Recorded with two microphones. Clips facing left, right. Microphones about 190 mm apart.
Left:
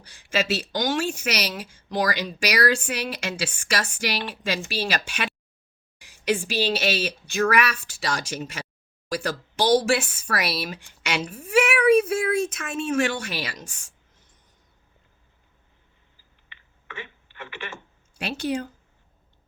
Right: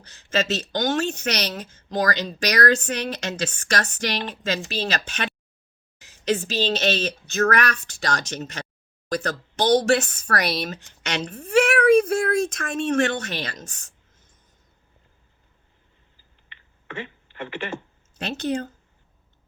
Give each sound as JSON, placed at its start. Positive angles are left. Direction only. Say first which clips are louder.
{"t": 0.0, "sound": "a woman's voice", "louder": "right 1 dB", "side_deg": 10}
{"t": 12.5, "sound": "speech", "louder": "right 3 dB", "side_deg": -40}
{"t": 12.9, "sound": "speech", "louder": "right 2 dB", "side_deg": 10}
{"t": 16.9, "sound": "speech", "louder": "right 5 dB", "side_deg": -30}
{"t": 18.2, "sound": "speech", "louder": "right 1 dB", "side_deg": 10}